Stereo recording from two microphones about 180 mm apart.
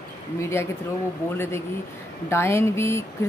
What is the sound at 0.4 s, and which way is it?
Speech, 15° left (ahead or behind).